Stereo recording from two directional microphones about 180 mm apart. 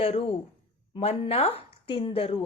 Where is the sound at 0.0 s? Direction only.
30° left (ahead or behind).